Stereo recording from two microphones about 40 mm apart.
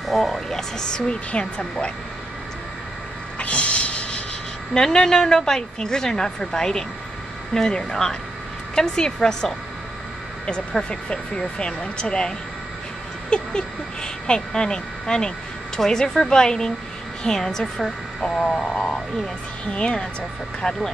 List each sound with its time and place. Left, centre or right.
0.1 s a woman's voice: centre; by 1.9 s left
3.3 s snort: left
4.7 s a woman's voice: centre
10.9 s a woman's voice: left